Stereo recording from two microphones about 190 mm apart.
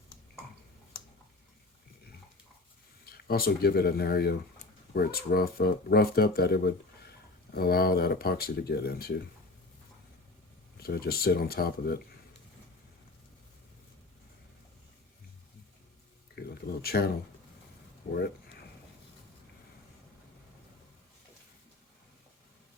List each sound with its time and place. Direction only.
3.1 s speech: 55° left (ahead or behind)
10.8 s speech: 55° left (ahead or behind)
16.4 s a sound: 55° left (ahead or behind)
16.8 s speech: 55° left (ahead or behind)